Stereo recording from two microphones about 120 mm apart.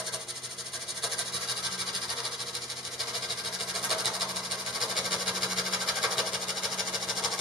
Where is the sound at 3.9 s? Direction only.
Centre (ahead or behind).